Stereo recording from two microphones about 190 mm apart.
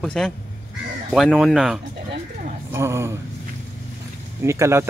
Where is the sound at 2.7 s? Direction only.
15° right (ahead or behind).